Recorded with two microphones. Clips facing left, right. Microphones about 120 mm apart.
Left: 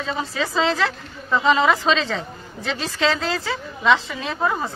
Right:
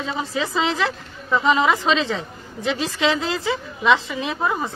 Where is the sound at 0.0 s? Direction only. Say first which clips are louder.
Even; 15° right (ahead or behind).